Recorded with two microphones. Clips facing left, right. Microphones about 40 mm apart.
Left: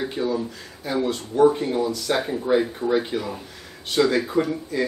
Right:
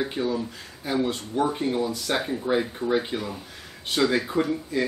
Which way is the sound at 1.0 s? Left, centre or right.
Centre.